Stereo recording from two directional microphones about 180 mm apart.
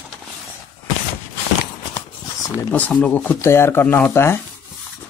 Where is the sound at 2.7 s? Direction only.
10° left (ahead or behind).